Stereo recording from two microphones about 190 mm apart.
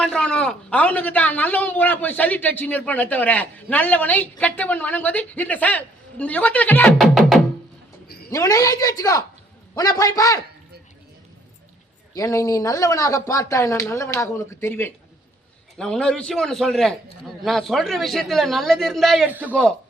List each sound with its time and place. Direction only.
0.0 s a man's voice: 5° left (ahead or behind)
8.0 s a sound: 55° left (ahead or behind)
8.3 s a woman's voice: 20° left (ahead or behind)
12.1 s a man's voice: 15° left (ahead or behind); by 19.5 s 10° right (ahead or behind)